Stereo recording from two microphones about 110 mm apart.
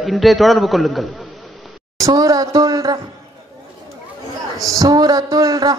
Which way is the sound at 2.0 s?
35° right (ahead or behind).